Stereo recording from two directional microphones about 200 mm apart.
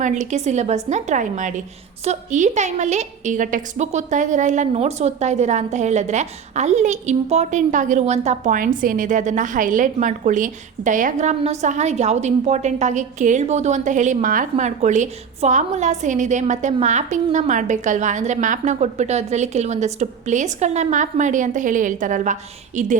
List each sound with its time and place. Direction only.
0.0 s a woman's voice: 40° right (ahead or behind)